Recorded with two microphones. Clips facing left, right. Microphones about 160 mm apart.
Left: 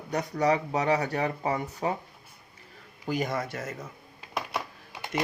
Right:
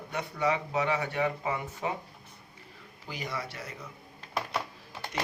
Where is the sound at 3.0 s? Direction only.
50° left (ahead or behind).